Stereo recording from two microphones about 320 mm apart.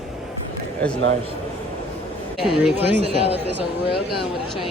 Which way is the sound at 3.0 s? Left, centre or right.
Centre.